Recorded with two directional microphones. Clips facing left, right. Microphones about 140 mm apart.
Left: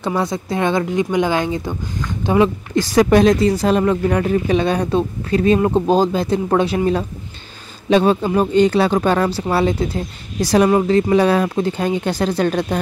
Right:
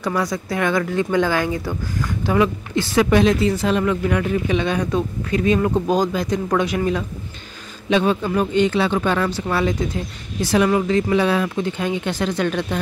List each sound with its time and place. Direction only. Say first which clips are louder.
0.0 s speech: left 2 dB; 25° left (ahead or behind)
2.7 s speech: left 4 dB; 40° left (ahead or behind)